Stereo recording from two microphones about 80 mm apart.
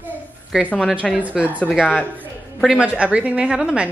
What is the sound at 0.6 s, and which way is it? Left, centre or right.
Speech, centre.